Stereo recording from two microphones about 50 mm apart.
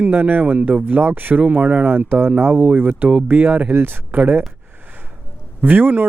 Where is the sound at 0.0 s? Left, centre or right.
Right.